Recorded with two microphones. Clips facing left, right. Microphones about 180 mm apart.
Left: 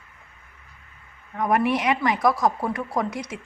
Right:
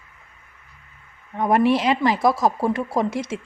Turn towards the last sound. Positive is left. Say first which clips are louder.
# right 4 dB
turn(degrees=-25)  # may be behind; listen again after turning